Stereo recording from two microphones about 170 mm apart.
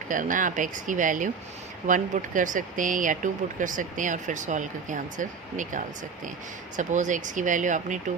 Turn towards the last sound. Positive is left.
turn(degrees=-45)  # may be behind; listen again after turning